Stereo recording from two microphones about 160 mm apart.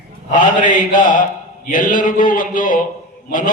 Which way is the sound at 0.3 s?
55° left (ahead or behind).